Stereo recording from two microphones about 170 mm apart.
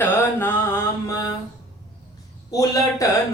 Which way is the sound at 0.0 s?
15° left (ahead or behind).